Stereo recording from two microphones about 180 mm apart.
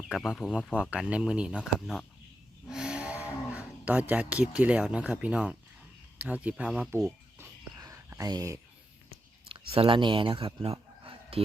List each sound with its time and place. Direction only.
0.1 s speech: centre (ahead or behind)
2.6 s cattle: 5° right (ahead or behind)
6.1 s a sound: 10° right (ahead or behind)
9.5 s speech: 30° right (ahead or behind)